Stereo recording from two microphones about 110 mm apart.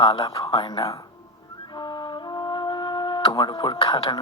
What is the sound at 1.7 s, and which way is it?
Music, 45° left (ahead or behind).